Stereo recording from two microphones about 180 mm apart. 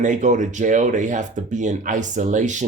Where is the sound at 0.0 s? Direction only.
45° right (ahead or behind).